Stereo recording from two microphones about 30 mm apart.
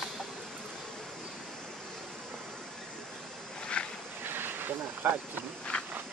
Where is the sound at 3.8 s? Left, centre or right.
Left.